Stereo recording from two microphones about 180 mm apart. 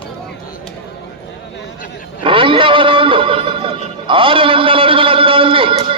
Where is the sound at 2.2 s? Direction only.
30° right (ahead or behind).